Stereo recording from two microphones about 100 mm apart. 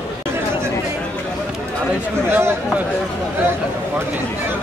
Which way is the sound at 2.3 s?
25° right (ahead or behind).